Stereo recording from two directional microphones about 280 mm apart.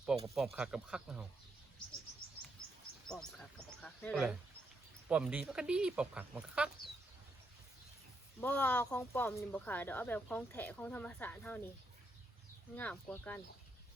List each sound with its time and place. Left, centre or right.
0.3 s speech: centre
3.1 s speech: centre
8.4 s speech: centre
12.7 s speech: centre